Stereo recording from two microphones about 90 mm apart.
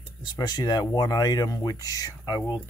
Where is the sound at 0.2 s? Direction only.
55° left (ahead or behind).